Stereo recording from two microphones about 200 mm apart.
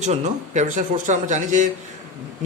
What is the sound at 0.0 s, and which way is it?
Speech, 35° right (ahead or behind).